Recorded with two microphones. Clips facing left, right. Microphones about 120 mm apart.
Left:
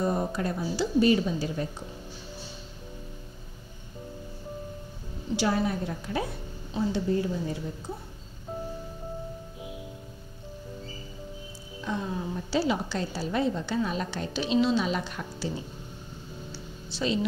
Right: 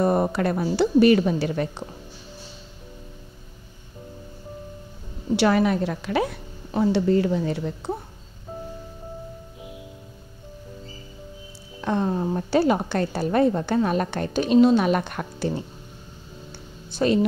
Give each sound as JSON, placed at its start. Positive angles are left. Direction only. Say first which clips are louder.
{"t": 0.0, "sound": "a woman's voice", "louder": "right 7 dB", "side_deg": -65}
{"t": 5.3, "sound": "a woman's voice", "louder": "right 7 dB", "side_deg": -70}
{"t": 11.8, "sound": "a woman's voice", "louder": "right 8 dB", "side_deg": -60}
{"t": 16.9, "sound": "speech", "louder": "right 8 dB", "side_deg": -50}